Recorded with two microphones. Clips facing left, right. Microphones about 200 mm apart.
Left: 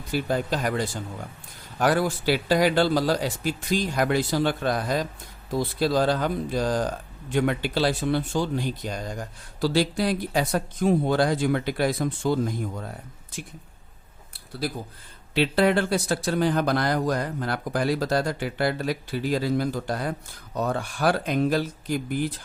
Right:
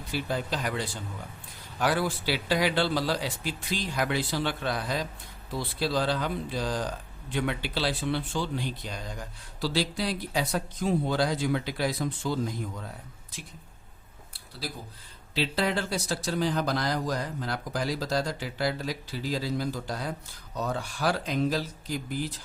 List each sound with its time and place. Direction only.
0.1 s speech: 50° left (ahead or behind)
15.4 s speech: 60° left (ahead or behind)